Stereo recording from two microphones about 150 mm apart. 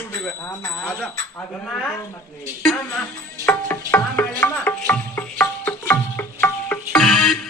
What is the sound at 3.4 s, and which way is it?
Music, 15° left (ahead or behind).